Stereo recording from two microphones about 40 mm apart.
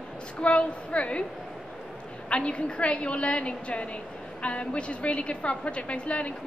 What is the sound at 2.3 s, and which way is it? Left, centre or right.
A woman's voice, left.